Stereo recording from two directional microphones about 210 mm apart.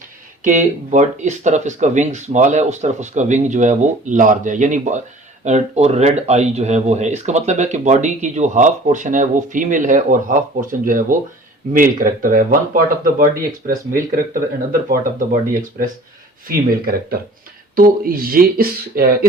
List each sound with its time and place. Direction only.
0.4 s speech: 35° right (ahead or behind)
16.5 s speech: 45° right (ahead or behind)